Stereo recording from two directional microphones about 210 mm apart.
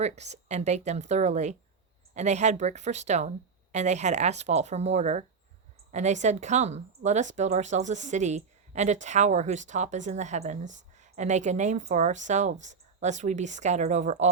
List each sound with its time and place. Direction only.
0.0 s speech: 30° right (ahead or behind)